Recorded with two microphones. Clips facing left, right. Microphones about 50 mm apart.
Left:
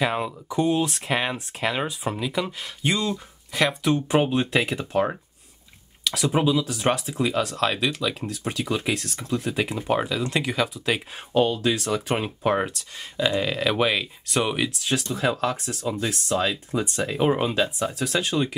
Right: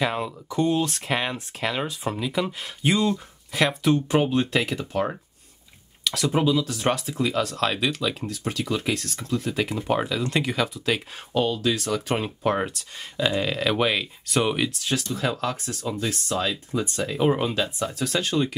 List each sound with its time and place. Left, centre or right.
0.0 s speech: centre
4.1 s speech: centre